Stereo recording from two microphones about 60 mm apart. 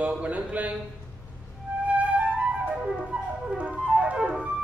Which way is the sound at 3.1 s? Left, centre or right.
Centre.